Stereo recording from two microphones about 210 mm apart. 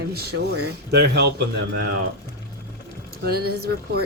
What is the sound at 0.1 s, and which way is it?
Speech, 50° right (ahead or behind).